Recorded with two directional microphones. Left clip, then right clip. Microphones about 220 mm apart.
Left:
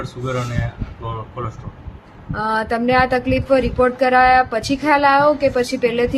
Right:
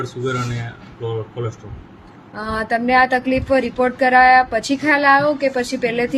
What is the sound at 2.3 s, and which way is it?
Speech, 10° left (ahead or behind).